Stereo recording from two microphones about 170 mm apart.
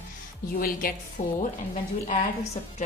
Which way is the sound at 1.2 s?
45° left (ahead or behind).